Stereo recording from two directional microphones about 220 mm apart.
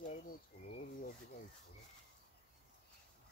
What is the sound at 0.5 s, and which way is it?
Speech, 45° left (ahead or behind).